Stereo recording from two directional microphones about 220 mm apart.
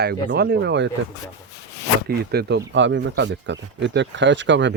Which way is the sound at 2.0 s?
45° right (ahead or behind).